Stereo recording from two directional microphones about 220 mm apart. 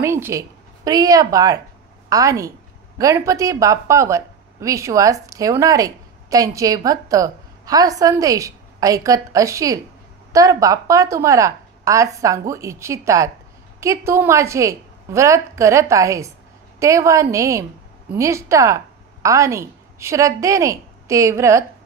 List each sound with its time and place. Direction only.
0.0 s a woman's voice: 10° right (ahead or behind)